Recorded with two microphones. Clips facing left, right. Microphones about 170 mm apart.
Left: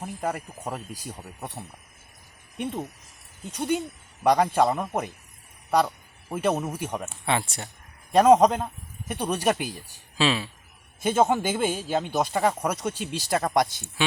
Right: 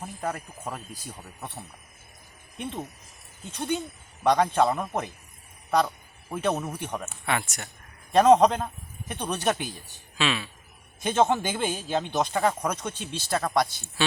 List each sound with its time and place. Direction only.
0.2 s a man's voice: 15° left (ahead or behind)
2.6 s a man's voice: 10° left (ahead or behind)
7.1 s speech: 30° left (ahead or behind)
8.1 s a man's voice: 10° left (ahead or behind)
10.2 s speech: 35° left (ahead or behind)
11.0 s a man's voice: 10° left (ahead or behind)